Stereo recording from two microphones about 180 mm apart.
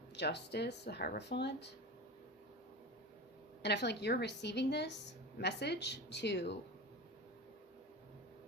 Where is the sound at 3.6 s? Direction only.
70° left (ahead or behind).